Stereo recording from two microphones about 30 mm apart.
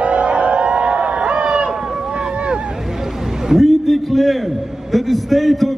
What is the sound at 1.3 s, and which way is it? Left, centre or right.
Run, right.